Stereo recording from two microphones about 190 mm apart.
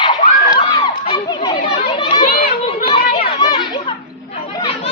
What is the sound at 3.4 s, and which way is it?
Children playing, 20° left (ahead or behind).